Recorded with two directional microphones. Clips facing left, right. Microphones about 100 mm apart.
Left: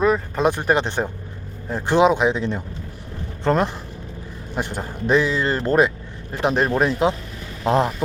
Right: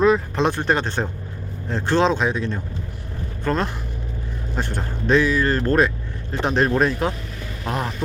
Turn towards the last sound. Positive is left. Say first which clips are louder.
# left 7 dB
turn(degrees=20)  # may be behind; listen again after turning